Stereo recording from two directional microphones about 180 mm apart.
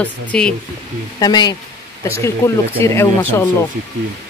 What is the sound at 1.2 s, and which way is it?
Speech, 25° left (ahead or behind).